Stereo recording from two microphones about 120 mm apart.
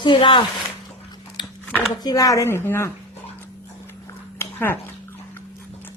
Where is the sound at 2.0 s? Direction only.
30° left (ahead or behind).